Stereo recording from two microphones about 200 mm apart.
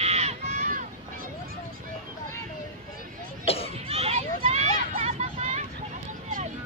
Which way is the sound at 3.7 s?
30° right (ahead or behind).